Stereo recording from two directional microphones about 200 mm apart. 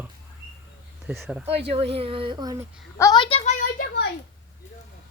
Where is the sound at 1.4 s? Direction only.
30° right (ahead or behind).